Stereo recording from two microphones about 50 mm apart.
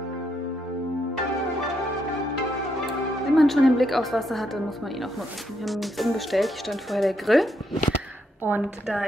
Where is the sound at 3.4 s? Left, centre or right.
Centre.